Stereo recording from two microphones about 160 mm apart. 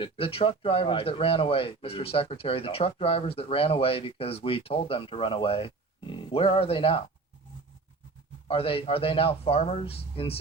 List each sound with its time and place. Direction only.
0.0 s speech: 35° left (ahead or behind)
8.4 s speech: 35° left (ahead or behind)